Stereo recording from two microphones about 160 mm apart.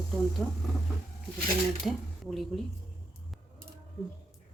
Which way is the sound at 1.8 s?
Centre (ahead or behind).